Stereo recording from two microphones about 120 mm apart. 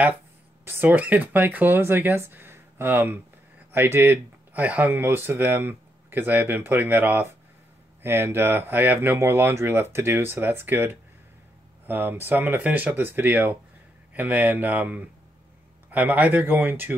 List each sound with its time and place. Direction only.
0.7 s speech: 15° right (ahead or behind)